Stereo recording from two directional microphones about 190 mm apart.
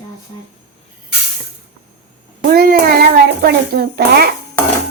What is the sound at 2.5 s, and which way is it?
A child's voice, 50° right (ahead or behind).